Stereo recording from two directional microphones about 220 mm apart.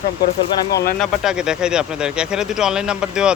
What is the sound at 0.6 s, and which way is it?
Speech, 15° left (ahead or behind).